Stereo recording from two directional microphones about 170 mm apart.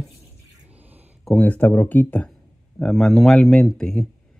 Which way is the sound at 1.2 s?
10° left (ahead or behind).